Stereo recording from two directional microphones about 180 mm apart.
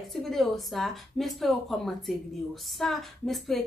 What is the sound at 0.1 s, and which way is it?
A woman's voice, centre (ahead or behind).